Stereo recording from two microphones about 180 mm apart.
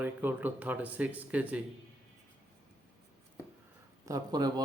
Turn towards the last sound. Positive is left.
turn(degrees=-20)  # may be behind; listen again after turning